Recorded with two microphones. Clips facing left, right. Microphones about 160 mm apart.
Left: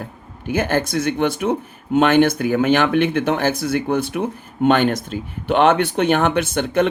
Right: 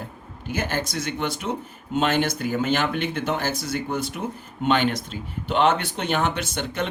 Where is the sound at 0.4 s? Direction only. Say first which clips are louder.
Left 7 dB; 55° left (ahead or behind).